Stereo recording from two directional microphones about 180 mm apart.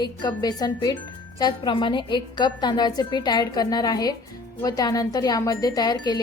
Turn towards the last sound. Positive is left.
turn(degrees=25)  # may be behind; listen again after turning